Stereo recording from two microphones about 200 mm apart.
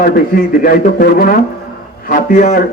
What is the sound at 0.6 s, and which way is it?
A man's voice, 45° left (ahead or behind).